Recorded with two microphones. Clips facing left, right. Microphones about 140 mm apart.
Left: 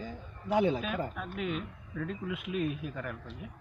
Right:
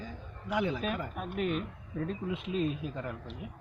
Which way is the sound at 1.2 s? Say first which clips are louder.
Right 3 dB; 50° right (ahead or behind).